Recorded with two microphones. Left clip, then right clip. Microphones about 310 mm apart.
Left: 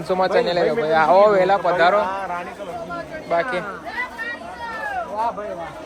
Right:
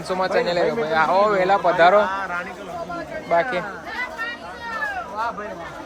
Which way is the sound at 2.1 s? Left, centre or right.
Centre.